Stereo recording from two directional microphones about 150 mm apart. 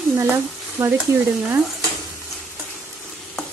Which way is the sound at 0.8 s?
15° right (ahead or behind).